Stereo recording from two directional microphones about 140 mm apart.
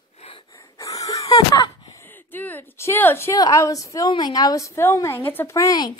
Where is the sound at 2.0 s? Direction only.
15° left (ahead or behind).